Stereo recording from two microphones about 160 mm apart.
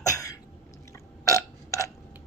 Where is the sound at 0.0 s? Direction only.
20° left (ahead or behind).